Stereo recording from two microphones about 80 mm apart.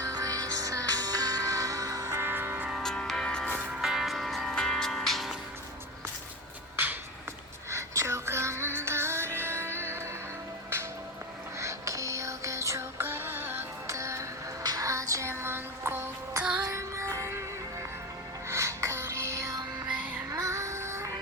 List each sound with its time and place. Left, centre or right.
0.0 s music: right
2.2 s music: right
2.7 s music: centre
3.6 s music: centre
7.7 s music: right
11.6 s music: right
13.8 s music: right
14.6 s music: right
16.4 s music: centre
16.7 s music: right
18.4 s music: right